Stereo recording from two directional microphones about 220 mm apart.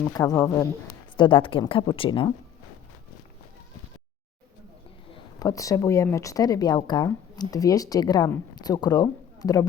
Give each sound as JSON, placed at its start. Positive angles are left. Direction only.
{"t": 0.1, "sound": "speech", "side_deg": 15}
{"t": 5.1, "sound": "speech", "side_deg": 15}